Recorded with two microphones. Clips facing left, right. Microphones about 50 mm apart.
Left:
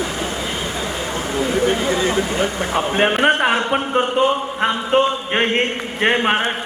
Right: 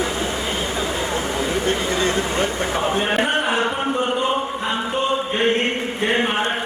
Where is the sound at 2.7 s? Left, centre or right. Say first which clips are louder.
Left 4 dB; left.